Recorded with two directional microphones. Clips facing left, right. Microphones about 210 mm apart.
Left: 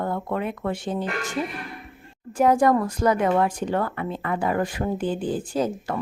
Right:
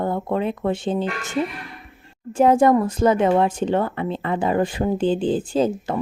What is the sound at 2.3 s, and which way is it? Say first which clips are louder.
Speech: right 3 dB; 25° right (ahead or behind).